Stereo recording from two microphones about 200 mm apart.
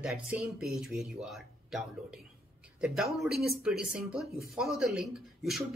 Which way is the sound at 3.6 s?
5° right (ahead or behind).